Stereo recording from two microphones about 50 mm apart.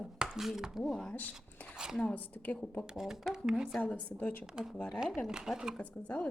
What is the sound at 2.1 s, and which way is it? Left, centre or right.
Speech, left.